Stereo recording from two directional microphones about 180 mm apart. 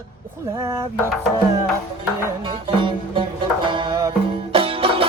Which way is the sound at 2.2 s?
25° right (ahead or behind).